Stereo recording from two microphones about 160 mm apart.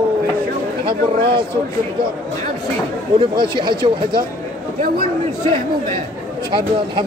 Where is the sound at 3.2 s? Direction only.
30° right (ahead or behind).